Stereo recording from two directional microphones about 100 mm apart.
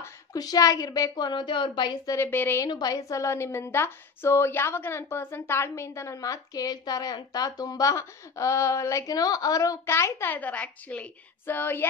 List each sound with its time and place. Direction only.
0.0 s a woman's voice: 40° left (ahead or behind)
2.2 s a woman's voice: 15° left (ahead or behind)
2.7 s a woman's voice: 35° left (ahead or behind)
10.3 s a woman's voice: 15° left (ahead or behind)